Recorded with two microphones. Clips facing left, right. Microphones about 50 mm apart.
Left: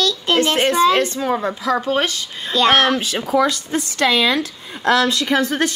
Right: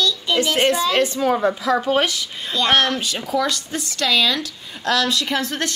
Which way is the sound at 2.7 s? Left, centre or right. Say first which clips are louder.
Left 2 dB; centre.